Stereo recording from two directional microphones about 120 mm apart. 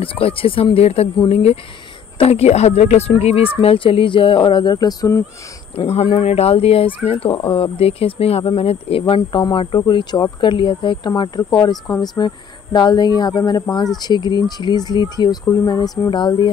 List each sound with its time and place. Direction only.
0.0 s a woman's voice: 50° left (ahead or behind); by 5.2 s 30° left (ahead or behind)
5.9 s a woman's voice: 55° left (ahead or behind)